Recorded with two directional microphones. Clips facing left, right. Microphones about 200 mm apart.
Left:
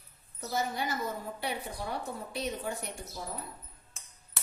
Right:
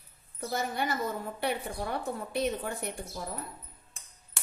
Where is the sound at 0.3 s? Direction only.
60° right (ahead or behind).